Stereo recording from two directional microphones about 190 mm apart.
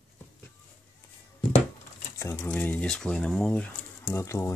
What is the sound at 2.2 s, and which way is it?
Speech, 15° left (ahead or behind).